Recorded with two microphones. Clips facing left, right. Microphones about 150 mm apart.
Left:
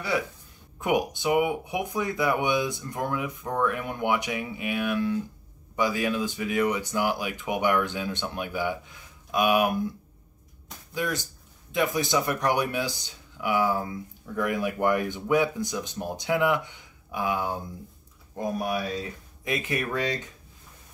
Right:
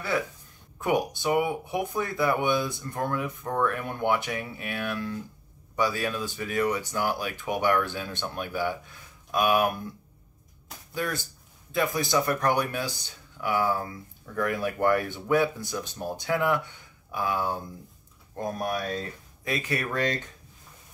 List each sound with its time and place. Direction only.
0.7 s speech: 15° left (ahead or behind)
11.0 s speech: 15° left (ahead or behind)